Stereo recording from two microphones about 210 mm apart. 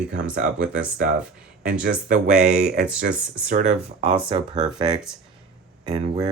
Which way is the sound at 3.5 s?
35° right (ahead or behind).